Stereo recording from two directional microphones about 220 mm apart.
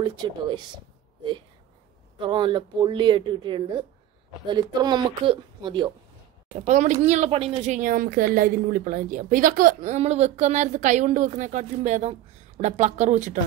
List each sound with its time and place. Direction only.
0.0 s speech: 20° right (ahead or behind)
2.2 s a woman's voice: 20° right (ahead or behind)